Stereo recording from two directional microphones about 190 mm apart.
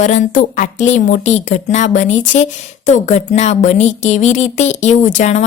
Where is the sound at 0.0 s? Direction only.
40° left (ahead or behind).